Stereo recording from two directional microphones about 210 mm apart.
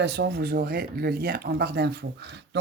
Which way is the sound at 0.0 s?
50° right (ahead or behind).